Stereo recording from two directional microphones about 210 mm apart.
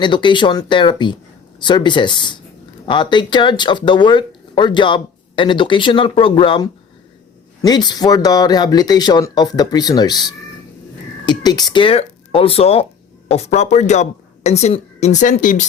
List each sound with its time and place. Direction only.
0.0 s speech: 20° left (ahead or behind)